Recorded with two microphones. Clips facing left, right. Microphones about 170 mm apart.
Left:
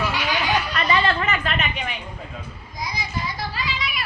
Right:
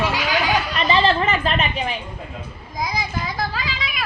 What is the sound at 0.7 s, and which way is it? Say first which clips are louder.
A woman's voice: right 5 dB; 25° right (ahead or behind).